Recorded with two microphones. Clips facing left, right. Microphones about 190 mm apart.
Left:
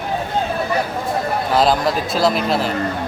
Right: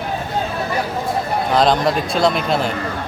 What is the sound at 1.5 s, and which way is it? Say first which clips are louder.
A man's voice: right 1 dB; 5° left (ahead or behind).